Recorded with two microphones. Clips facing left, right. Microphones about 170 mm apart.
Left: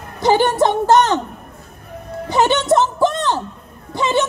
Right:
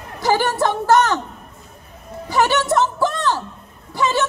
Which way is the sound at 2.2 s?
20° left (ahead or behind).